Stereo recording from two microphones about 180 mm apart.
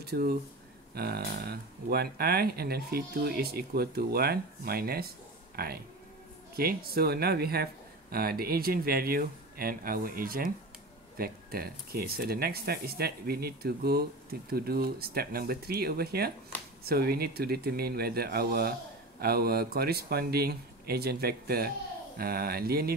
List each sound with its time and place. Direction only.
0.0 s speech: 60° right (ahead or behind)